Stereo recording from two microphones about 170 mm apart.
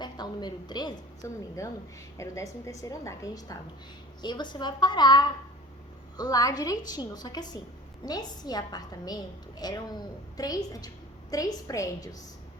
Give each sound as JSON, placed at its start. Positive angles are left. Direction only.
{"t": 0.0, "sound": "a woman's voice", "side_deg": 25}